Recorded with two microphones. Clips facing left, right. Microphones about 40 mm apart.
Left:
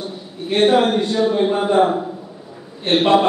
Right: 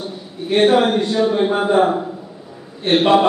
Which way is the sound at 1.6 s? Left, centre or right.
Centre.